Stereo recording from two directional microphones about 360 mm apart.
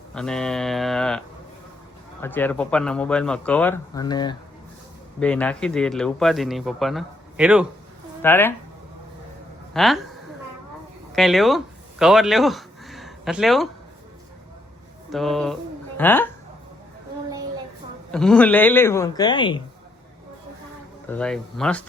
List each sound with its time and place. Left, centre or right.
0.1 s speech: centre
2.2 s speech: centre
9.7 s speech: centre
11.1 s speech: centre
15.1 s speech: centre
18.1 s a man's voice: centre
21.1 s speech: centre